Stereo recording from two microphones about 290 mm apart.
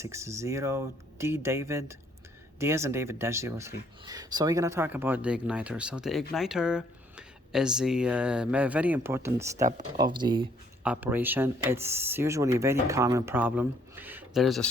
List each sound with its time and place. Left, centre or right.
0.0 s speech: centre